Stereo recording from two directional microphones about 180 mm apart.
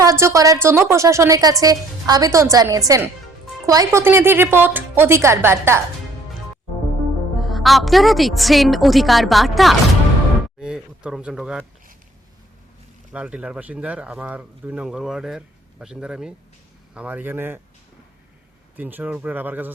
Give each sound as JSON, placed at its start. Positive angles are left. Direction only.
{"t": 0.0, "sound": "a woman's voice", "side_deg": -15}
{"t": 7.3, "sound": "speech", "side_deg": 0}
{"t": 13.1, "sound": "speech", "side_deg": -5}
{"t": 18.8, "sound": "speech", "side_deg": -10}